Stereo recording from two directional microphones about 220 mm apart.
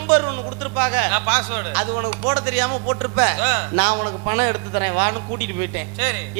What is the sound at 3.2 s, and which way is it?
Speech, 15° right (ahead or behind).